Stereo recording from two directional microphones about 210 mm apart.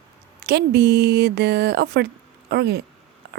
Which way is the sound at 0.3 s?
50° right (ahead or behind).